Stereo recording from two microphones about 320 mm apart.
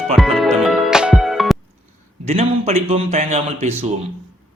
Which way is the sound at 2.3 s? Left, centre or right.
Centre.